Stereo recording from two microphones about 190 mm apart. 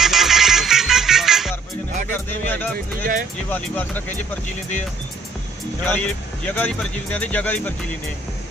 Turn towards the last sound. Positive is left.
turn(degrees=10)  # may be behind; listen again after turning